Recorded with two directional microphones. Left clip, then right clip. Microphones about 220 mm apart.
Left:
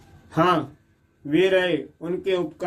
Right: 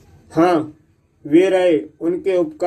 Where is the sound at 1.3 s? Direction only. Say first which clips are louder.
Right 6 dB; 20° right (ahead or behind).